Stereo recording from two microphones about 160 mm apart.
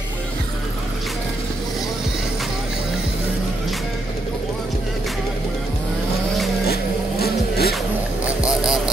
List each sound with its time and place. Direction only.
6.7 s vehicle: 75° left (ahead or behind)
8.5 s vehicle: 5° right (ahead or behind)